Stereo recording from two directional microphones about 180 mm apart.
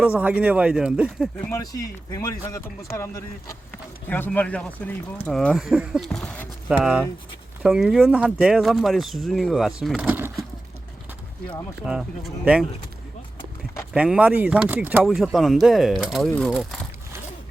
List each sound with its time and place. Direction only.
0.0 s speech: 10° right (ahead or behind)
1.4 s speech: 15° left (ahead or behind); by 10.3 s 10° right (ahead or behind)
11.9 s speech: 5° right (ahead or behind)
13.9 s speech: 5° right (ahead or behind)